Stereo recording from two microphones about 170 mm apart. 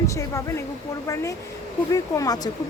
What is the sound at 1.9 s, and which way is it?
Speech, 20° left (ahead or behind).